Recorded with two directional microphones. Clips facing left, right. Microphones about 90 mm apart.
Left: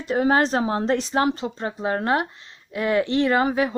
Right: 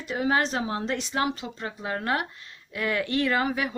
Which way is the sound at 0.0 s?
40° left (ahead or behind).